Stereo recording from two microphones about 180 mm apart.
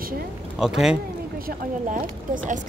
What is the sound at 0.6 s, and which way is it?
Speech, 5° right (ahead or behind).